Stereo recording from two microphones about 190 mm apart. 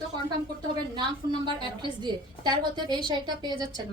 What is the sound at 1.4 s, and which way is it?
A woman's voice, 25° right (ahead or behind).